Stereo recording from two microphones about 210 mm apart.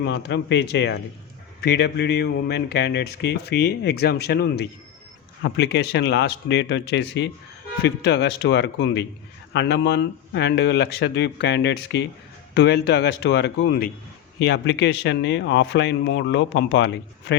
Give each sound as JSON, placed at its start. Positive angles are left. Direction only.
{"t": 0.0, "sound": "speech", "side_deg": 55}